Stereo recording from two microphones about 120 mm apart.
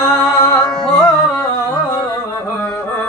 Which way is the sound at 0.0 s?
20° left (ahead or behind).